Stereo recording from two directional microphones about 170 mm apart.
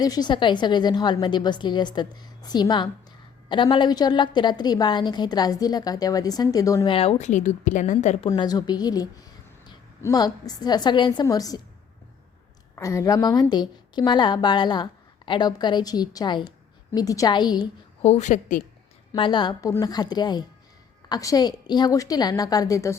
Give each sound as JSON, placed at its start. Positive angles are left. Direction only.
{"t": 0.0, "sound": "a woman's voice", "side_deg": 25}
{"t": 6.8, "sound": "a woman's voice", "side_deg": 35}
{"t": 8.3, "sound": "a woman's voice", "side_deg": 20}
{"t": 12.7, "sound": "a woman's voice", "side_deg": 20}
{"t": 18.0, "sound": "a woman's voice", "side_deg": 40}
{"t": 19.1, "sound": "a woman's voice", "side_deg": 30}